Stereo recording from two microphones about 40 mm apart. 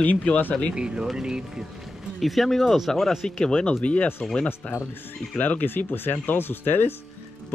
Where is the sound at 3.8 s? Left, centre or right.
Left.